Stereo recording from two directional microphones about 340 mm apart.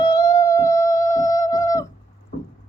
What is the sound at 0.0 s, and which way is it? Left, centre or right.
Music, centre.